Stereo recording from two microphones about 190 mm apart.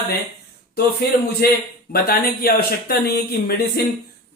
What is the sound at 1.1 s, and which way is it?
Speech, 40° left (ahead or behind).